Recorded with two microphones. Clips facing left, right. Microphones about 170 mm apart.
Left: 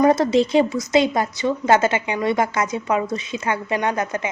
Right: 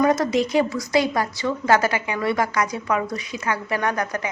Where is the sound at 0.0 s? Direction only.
30° left (ahead or behind).